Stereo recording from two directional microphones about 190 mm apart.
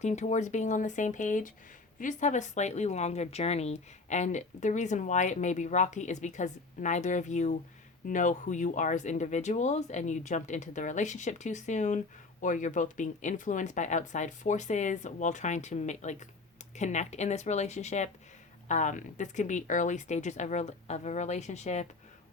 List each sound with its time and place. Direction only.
0.0 s speech: 40° left (ahead or behind)